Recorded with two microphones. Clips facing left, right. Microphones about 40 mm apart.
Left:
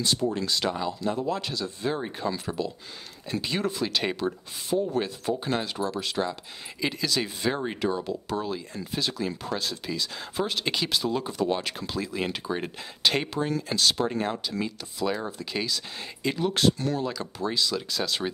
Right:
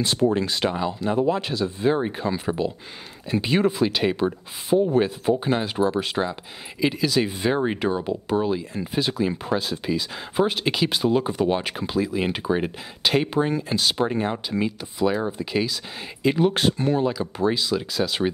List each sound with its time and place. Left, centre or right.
0.0 s speech: right
6.8 s speech: centre
10.9 s speech: right
13.3 s speech: right
15.0 s speech: centre
16.3 s speech: right